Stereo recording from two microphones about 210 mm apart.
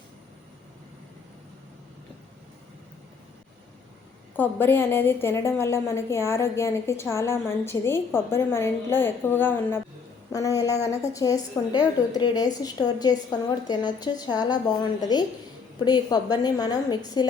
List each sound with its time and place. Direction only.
4.4 s a woman's voice: 10° left (ahead or behind)
15.8 s a woman's voice: 20° left (ahead or behind)